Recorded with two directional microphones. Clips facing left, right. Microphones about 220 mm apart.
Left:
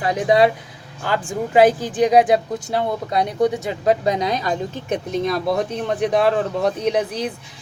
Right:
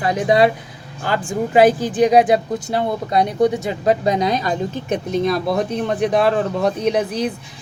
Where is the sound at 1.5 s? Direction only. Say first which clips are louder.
Right 1 dB; 20° left (ahead or behind).